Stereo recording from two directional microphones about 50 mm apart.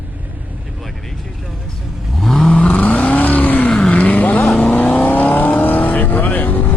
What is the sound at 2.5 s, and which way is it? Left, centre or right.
Vehicle, left.